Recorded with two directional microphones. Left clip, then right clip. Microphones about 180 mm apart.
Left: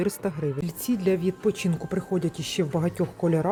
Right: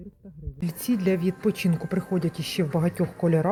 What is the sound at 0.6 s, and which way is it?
Speech, centre (ahead or behind).